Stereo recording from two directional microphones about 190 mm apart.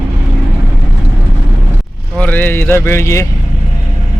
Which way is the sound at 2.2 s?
10° left (ahead or behind).